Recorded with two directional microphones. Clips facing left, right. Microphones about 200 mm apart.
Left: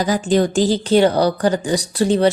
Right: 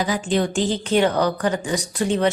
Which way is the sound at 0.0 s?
40° left (ahead or behind).